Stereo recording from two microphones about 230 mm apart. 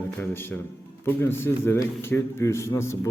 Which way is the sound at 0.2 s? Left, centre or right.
Centre.